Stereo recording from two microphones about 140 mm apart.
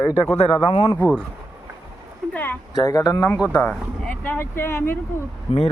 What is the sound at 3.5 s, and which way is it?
Speech, 10° left (ahead or behind).